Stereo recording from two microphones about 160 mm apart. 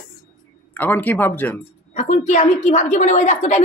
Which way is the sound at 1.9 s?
50° left (ahead or behind).